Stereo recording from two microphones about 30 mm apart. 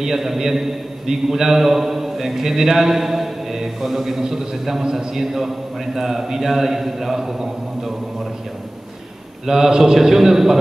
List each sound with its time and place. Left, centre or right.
0.0 s a man's voice: centre
9.5 s a man's voice: centre